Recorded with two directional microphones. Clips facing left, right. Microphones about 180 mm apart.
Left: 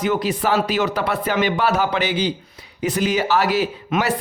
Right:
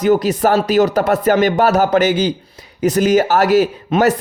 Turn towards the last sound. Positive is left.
turn(degrees=-30)  # may be behind; listen again after turning